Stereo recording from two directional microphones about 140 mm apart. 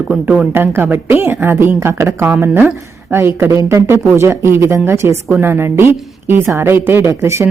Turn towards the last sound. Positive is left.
turn(degrees=-20)  # may be behind; listen again after turning